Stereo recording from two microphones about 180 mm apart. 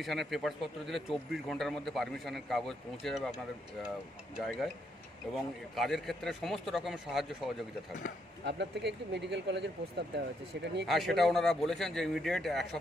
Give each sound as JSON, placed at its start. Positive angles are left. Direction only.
{"t": 0.0, "sound": "a man's voice", "side_deg": 0}
{"t": 4.4, "sound": "a man's voice", "side_deg": 0}
{"t": 8.5, "sound": "speech", "side_deg": -75}
{"t": 10.9, "sound": "a man's voice", "side_deg": 0}